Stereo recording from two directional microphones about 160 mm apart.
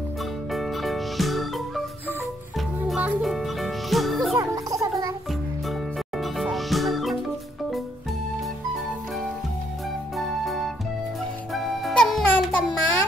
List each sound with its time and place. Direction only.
0.5 s music: centre (ahead or behind)
2.9 s music: 5° right (ahead or behind)
4.4 s music: 20° right (ahead or behind)
5.7 s music: centre (ahead or behind)
10.1 s music: centre (ahead or behind)